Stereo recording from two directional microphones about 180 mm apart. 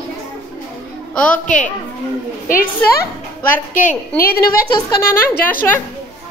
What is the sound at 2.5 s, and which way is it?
A woman's voice, 50° left (ahead or behind).